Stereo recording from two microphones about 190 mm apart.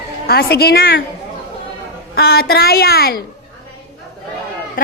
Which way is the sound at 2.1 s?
55° left (ahead or behind).